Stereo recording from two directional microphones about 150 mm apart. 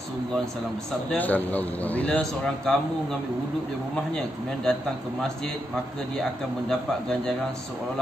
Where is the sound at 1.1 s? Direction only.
10° left (ahead or behind).